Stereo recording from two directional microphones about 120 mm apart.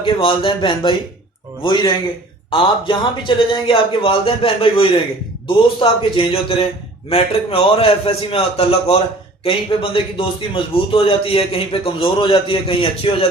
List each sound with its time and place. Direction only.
0.0 s a man's voice: 45° left (ahead or behind)